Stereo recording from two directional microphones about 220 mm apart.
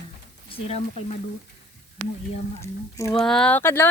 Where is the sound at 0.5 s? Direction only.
25° left (ahead or behind).